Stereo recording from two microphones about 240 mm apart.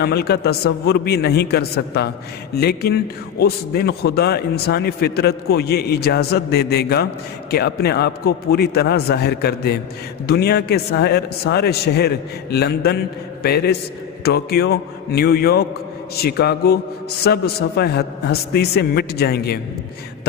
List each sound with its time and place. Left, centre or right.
0.0 s a man's voice: left